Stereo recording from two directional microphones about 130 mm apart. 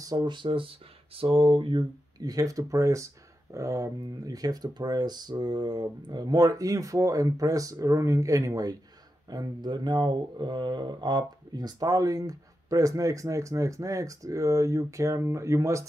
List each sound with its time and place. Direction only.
0.0 s speech: 30° right (ahead or behind)